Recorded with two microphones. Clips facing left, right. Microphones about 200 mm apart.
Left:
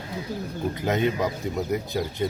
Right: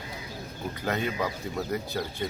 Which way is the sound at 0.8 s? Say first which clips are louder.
Left 5 dB; 20° left (ahead or behind).